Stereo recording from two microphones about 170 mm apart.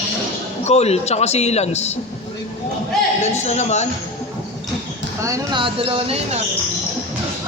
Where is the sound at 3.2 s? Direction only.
40° left (ahead or behind).